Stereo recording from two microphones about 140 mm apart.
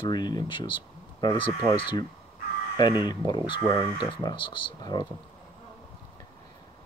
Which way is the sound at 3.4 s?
35° left (ahead or behind).